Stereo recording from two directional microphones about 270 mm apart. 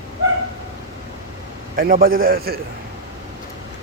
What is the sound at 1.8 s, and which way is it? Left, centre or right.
Speech, right.